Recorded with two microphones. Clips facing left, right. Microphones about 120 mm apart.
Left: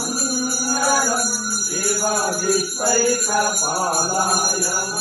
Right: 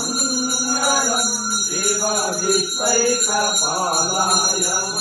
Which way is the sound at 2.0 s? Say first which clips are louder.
Left 2 dB; 30° left (ahead or behind).